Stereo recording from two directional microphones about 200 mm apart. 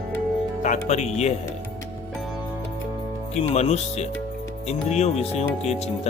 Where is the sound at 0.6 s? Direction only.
35° left (ahead or behind).